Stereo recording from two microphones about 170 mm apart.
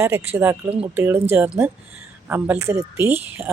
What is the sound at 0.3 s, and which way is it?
Speech, 10° right (ahead or behind).